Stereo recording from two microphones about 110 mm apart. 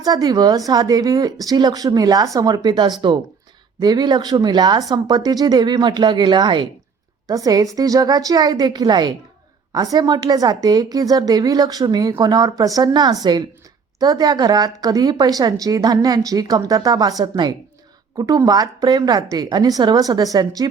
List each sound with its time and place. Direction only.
0.0 s a woman's voice: 35° right (ahead or behind)
7.3 s a woman's voice: 30° right (ahead or behind)